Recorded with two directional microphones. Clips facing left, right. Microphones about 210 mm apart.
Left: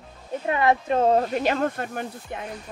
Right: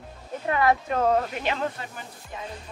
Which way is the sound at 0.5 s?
25° left (ahead or behind).